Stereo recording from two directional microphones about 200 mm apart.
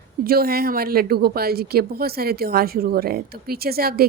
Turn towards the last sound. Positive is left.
turn(degrees=-50)  # may be behind; listen again after turning